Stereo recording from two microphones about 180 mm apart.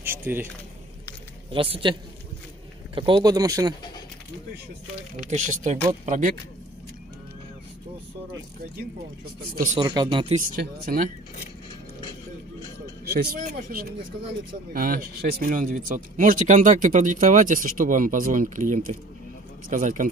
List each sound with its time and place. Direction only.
0.0 s squish: 10° right (ahead or behind)
1.5 s speech: 30° right (ahead or behind)
5.3 s speech: 45° right (ahead or behind)
9.4 s speech: 60° right (ahead or behind)
9.8 s speech: 25° right (ahead or behind)
10.5 s speech: 50° right (ahead or behind)
13.1 s speech: 60° right (ahead or behind)